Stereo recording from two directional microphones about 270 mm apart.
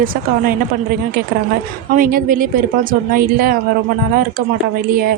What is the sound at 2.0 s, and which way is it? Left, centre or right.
A woman's voice, right.